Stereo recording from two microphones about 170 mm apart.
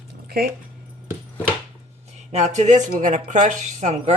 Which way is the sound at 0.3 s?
60° right (ahead or behind).